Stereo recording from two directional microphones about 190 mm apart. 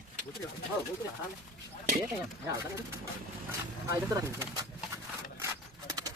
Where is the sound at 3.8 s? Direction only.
15° right (ahead or behind).